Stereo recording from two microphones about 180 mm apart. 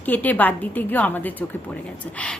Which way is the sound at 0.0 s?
10° left (ahead or behind).